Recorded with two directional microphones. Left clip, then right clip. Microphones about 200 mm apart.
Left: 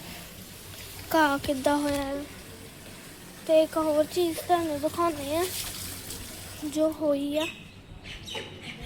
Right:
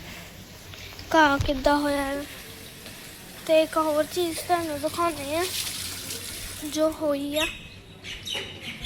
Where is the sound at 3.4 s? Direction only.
10° left (ahead or behind).